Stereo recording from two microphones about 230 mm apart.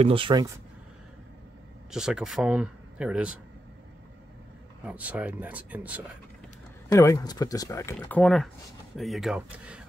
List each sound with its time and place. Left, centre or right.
0.0 s speech: right
1.9 s speech: centre
4.8 s speech: centre
6.9 s speech: centre
8.2 s speech: centre